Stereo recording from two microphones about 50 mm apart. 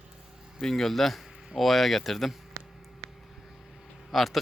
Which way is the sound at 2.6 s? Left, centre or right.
Right.